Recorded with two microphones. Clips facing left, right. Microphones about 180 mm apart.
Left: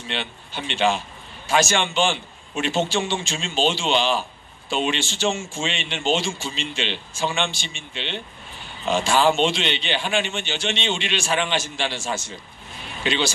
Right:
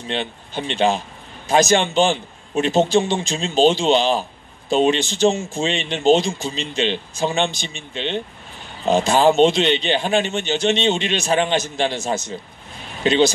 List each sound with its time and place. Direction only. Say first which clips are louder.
0.1 s a man's voice: right 6 dB; 40° right (ahead or behind)
13.0 s a man's voice: right 7 dB; 40° right (ahead or behind)